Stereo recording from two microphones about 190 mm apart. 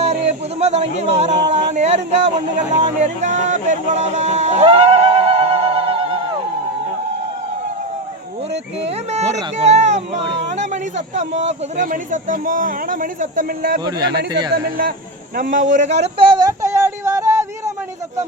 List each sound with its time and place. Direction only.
0.0 s music: 35° right (ahead or behind)
9.1 s speech: 35° right (ahead or behind)
15.7 s speech: 40° right (ahead or behind)
16.1 s a sound: 25° right (ahead or behind)